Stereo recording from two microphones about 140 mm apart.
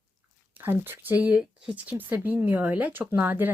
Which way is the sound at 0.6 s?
15° right (ahead or behind).